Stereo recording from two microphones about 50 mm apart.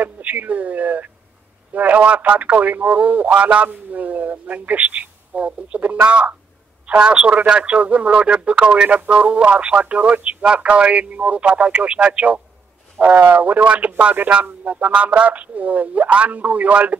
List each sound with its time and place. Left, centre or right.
0.0 s speech: right